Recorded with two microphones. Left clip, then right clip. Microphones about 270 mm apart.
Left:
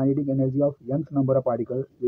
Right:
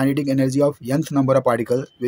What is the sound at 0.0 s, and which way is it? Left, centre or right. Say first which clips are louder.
Speech: right 4 dB; right.